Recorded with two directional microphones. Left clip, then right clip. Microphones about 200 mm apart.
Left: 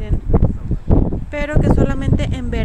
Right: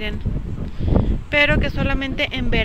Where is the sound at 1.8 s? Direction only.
15° left (ahead or behind).